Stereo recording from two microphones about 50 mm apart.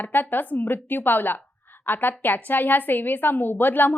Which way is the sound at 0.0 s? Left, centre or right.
Left.